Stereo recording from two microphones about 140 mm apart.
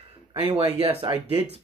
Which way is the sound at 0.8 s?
45° right (ahead or behind).